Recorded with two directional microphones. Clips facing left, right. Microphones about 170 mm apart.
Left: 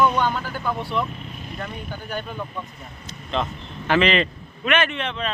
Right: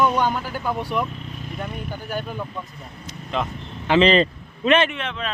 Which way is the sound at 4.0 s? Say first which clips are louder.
Right 4 dB; 30° right (ahead or behind).